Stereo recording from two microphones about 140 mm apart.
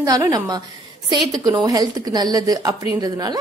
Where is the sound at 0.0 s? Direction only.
25° right (ahead or behind).